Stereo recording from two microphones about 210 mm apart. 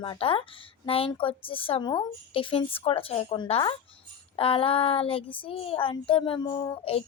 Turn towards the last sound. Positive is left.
turn(degrees=20)  # may be behind; listen again after turning